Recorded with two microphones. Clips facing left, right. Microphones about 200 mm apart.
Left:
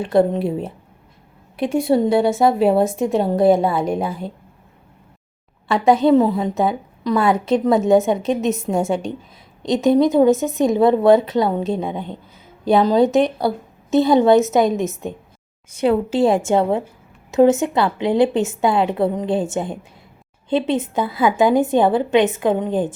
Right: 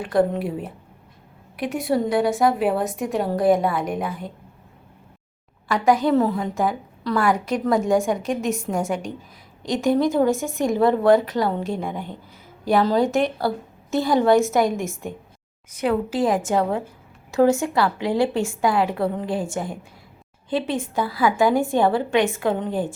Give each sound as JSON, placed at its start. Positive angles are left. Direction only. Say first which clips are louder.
{"t": 0.0, "sound": "a woman's voice", "louder": "left 4 dB", "side_deg": 25}
{"t": 5.6, "sound": "a woman's voice", "louder": "left 4 dB", "side_deg": 25}